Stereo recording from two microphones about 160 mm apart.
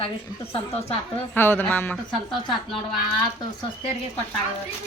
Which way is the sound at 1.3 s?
15° left (ahead or behind).